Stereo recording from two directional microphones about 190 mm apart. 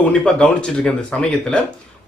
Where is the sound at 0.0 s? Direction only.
5° left (ahead or behind).